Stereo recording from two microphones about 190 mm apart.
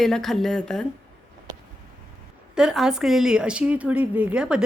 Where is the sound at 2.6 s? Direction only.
5° right (ahead or behind).